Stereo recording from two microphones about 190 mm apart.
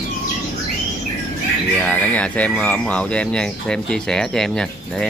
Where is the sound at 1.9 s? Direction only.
10° left (ahead or behind).